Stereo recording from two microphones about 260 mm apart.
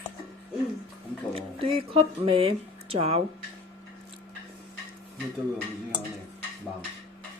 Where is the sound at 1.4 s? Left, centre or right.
Right.